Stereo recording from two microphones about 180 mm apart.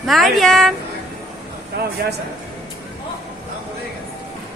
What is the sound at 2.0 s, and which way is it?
Speech, 55° right (ahead or behind).